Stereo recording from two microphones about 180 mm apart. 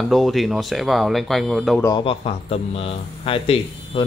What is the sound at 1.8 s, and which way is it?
Speech, 25° left (ahead or behind).